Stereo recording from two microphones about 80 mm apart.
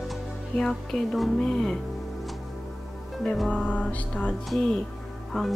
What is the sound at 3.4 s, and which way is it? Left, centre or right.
Music, centre.